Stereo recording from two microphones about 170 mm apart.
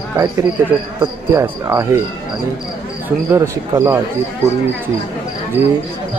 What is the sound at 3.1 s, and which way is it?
Speech, 15° right (ahead or behind).